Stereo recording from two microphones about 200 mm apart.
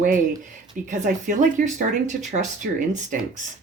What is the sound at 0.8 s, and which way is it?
Speech, 40° right (ahead or behind).